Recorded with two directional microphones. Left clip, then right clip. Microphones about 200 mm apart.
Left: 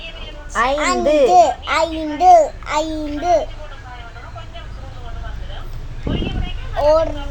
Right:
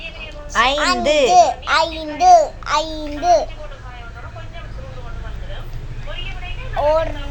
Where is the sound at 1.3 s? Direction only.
20° left (ahead or behind).